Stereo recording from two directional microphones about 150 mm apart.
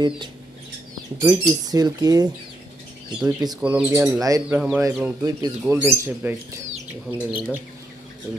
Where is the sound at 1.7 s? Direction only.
25° right (ahead or behind).